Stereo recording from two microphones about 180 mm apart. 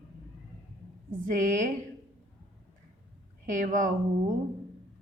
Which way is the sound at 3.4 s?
45° right (ahead or behind).